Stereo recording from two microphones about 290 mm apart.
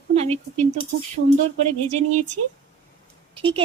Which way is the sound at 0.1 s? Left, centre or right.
Right.